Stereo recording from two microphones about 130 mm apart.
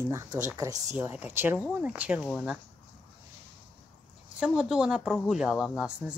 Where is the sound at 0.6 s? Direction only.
25° right (ahead or behind).